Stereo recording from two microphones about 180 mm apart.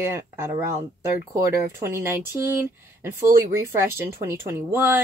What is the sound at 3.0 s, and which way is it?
Speech, 15° right (ahead or behind).